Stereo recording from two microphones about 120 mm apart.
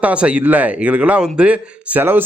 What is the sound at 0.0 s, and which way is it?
A man's voice, 10° right (ahead or behind).